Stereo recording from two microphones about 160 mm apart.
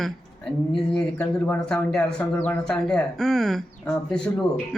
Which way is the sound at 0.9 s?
5° left (ahead or behind).